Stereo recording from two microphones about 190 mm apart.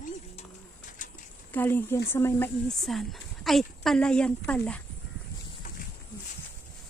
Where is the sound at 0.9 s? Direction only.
45° left (ahead or behind).